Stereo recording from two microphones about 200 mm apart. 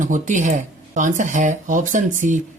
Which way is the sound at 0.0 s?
40° right (ahead or behind).